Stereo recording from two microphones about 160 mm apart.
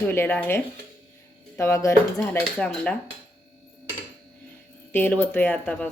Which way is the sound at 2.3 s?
5° left (ahead or behind).